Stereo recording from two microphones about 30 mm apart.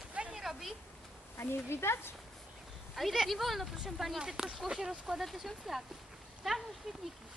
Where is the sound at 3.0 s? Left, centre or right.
Centre.